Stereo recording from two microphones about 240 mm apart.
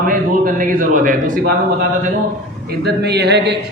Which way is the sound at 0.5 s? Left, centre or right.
Right.